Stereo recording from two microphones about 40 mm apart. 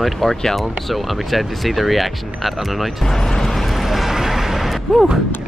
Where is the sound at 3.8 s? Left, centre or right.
Centre.